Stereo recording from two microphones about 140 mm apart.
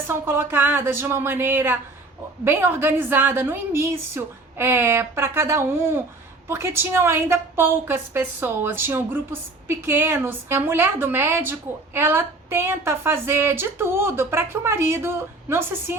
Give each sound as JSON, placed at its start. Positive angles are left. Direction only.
{"t": 0.1, "sound": "a woman's voice", "side_deg": -15}